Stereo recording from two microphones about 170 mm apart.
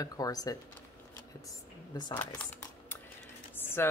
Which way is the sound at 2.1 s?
10° left (ahead or behind).